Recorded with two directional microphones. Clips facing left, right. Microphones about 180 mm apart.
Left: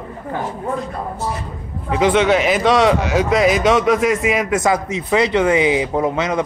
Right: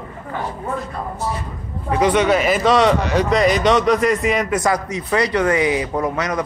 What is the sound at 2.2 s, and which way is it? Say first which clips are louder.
Speech: left 1 dB; 5° left (ahead or behind).